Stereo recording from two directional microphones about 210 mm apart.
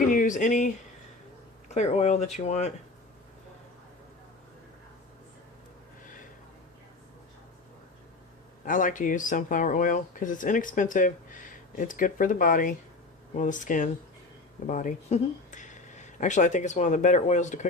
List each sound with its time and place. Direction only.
0.1 s speech: 40° left (ahead or behind)
1.7 s speech: 30° left (ahead or behind)
8.6 s speech: 40° left (ahead or behind)